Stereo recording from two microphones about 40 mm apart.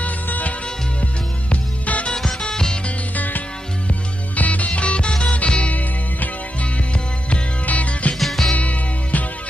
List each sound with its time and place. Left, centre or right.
0.0 s music: left
1.5 s music: left
2.5 s music: centre
3.2 s music: left
5.7 s music: left
6.9 s music: left
7.6 s music: left
8.2 s music: centre
8.5 s music: left